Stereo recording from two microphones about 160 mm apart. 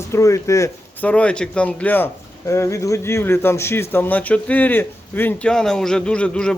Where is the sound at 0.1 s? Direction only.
20° left (ahead or behind).